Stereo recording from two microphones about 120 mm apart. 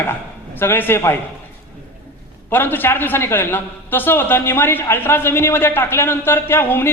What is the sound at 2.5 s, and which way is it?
A man's voice, 15° left (ahead or behind).